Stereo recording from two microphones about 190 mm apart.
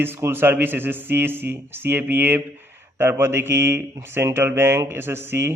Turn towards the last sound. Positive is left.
turn(degrees=-15)  # may be behind; listen again after turning